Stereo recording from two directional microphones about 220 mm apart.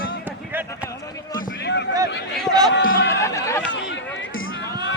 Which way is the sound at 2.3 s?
Centre (ahead or behind).